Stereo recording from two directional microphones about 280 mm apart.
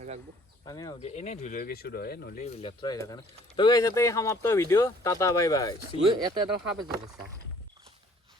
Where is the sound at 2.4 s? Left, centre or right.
Left.